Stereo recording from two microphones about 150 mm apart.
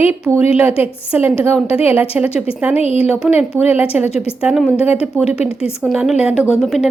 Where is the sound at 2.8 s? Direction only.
45° left (ahead or behind).